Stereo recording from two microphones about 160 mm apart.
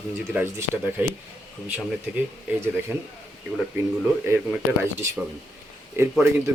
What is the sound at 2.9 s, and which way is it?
Speech, 10° right (ahead or behind).